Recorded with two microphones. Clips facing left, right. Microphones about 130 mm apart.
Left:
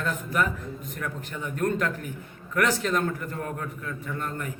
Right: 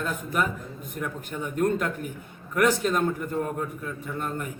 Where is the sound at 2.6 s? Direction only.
20° right (ahead or behind).